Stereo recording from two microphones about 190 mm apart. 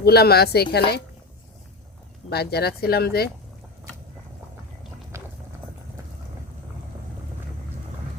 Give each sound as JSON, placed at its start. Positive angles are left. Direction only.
{"t": 0.0, "sound": "speech", "side_deg": 55}
{"t": 2.3, "sound": "speech", "side_deg": 60}